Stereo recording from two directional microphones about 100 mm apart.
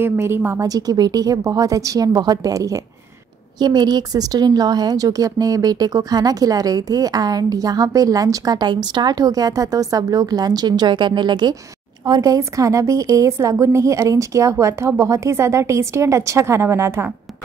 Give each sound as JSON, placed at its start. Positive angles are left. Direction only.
{"t": 0.0, "sound": "a woman's voice", "side_deg": -25}
{"t": 0.6, "sound": "a woman's voice", "side_deg": -40}
{"t": 12.1, "sound": "a woman's voice", "side_deg": -35}